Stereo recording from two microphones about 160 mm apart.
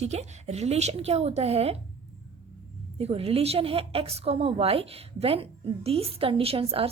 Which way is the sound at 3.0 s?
40° right (ahead or behind).